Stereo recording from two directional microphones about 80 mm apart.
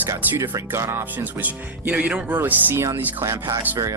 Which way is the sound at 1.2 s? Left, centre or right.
Right.